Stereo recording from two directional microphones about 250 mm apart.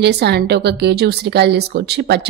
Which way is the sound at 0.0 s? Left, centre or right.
Right.